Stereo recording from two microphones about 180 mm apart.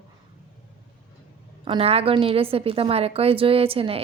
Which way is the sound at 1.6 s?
30° right (ahead or behind).